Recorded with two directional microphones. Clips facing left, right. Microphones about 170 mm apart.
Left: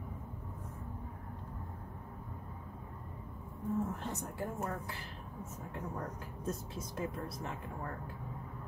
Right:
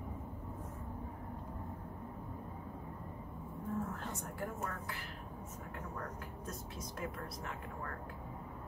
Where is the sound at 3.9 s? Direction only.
20° left (ahead or behind).